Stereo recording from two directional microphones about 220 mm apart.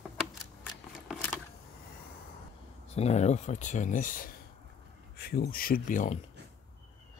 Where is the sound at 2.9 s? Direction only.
30° left (ahead or behind).